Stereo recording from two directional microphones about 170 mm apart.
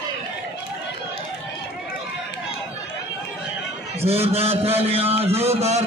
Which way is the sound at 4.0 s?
35° right (ahead or behind).